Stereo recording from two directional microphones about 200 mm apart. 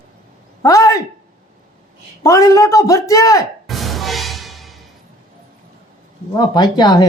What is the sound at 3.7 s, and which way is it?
Music, centre (ahead or behind).